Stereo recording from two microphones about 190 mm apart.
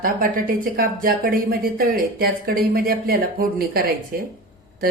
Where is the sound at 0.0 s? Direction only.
50° right (ahead or behind).